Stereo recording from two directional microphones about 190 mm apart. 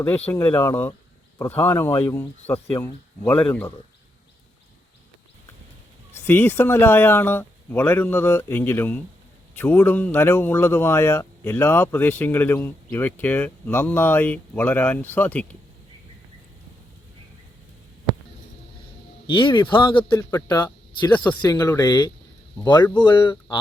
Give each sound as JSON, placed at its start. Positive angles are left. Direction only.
{"t": 0.3, "sound": "speech", "side_deg": 10}
{"t": 6.1, "sound": "speech", "side_deg": 10}
{"t": 19.3, "sound": "speech", "side_deg": 25}